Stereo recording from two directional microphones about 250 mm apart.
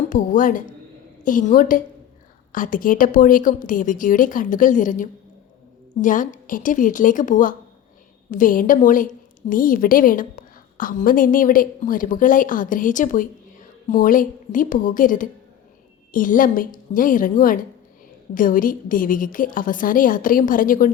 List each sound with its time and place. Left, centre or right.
0.1 s a woman's voice: left